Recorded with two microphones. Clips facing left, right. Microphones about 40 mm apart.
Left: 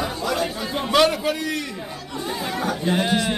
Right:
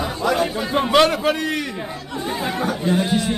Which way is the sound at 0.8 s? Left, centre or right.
Centre.